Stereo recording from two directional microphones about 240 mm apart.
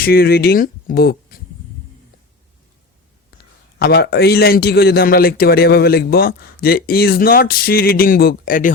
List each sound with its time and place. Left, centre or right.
0.0 s speech: left
3.8 s a man's voice: left